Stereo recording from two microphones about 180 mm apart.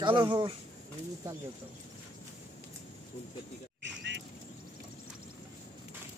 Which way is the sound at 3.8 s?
75° right (ahead or behind).